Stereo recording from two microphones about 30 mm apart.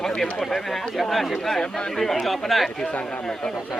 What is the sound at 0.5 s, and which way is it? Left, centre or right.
Speech, centre.